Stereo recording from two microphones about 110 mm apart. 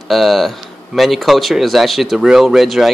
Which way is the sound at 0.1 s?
Centre (ahead or behind).